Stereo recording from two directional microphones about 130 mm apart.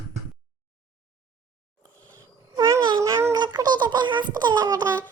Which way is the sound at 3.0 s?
25° right (ahead or behind).